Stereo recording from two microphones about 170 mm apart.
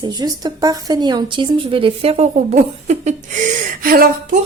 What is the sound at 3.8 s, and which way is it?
Speech, 55° right (ahead or behind).